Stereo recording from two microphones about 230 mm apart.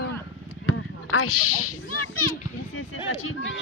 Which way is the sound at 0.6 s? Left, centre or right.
Left.